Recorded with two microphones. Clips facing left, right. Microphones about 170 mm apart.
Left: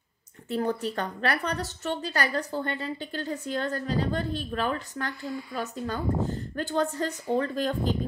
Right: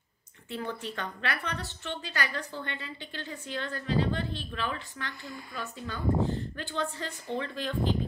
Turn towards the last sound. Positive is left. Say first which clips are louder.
# left 3 dB
turn(degrees=40)  # may be behind; listen again after turning